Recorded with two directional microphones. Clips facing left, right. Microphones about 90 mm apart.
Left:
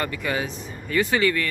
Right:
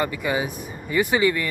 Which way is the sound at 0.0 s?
15° right (ahead or behind).